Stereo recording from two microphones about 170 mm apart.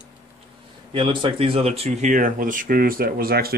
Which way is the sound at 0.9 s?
30° right (ahead or behind).